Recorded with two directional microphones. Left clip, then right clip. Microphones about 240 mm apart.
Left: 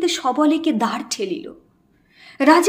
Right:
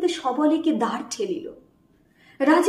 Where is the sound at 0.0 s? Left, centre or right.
Left.